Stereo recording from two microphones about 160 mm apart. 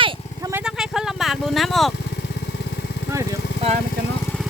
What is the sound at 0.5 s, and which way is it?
Vehicle, 5° right (ahead or behind).